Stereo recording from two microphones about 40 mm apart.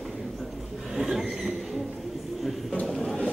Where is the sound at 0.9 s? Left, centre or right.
Centre.